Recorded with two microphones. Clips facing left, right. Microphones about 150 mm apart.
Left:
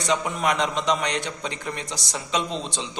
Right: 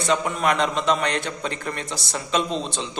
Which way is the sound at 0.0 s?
15° left (ahead or behind).